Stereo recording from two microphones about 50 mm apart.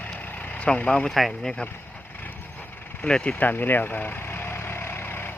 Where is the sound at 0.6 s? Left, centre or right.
Left.